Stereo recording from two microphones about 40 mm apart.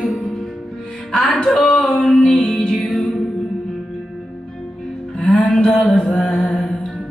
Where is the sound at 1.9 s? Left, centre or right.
Left.